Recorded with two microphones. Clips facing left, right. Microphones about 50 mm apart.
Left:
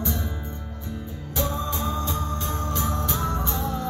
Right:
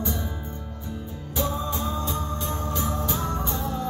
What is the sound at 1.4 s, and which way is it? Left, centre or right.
Music, centre.